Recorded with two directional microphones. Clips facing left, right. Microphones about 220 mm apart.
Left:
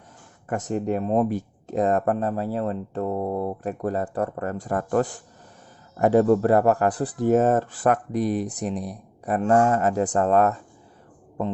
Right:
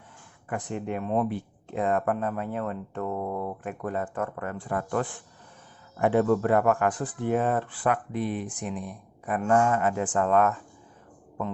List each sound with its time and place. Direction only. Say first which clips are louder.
0.4 s speech: left 6 dB; 45° left (ahead or behind)